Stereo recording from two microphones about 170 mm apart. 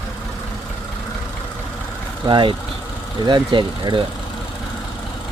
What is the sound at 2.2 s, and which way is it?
Speech, 30° right (ahead or behind).